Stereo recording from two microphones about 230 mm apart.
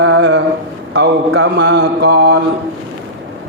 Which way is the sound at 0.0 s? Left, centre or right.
Right.